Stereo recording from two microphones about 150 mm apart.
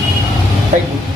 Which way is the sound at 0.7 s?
55° right (ahead or behind).